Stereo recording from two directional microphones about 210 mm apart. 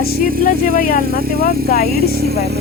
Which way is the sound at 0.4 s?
45° left (ahead or behind).